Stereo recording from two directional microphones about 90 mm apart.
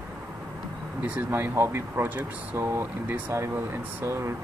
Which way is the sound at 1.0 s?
15° right (ahead or behind).